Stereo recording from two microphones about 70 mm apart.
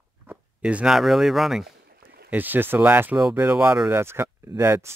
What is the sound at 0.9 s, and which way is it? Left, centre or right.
Speech, centre.